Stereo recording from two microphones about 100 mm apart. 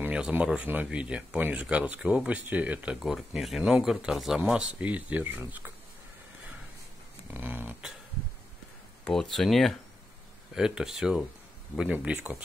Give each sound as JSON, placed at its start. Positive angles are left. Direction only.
{"t": 0.0, "sound": "speech", "side_deg": -15}
{"t": 3.0, "sound": "speech", "side_deg": -5}
{"t": 7.3, "sound": "a sound", "side_deg": -20}
{"t": 9.0, "sound": "speech", "side_deg": 5}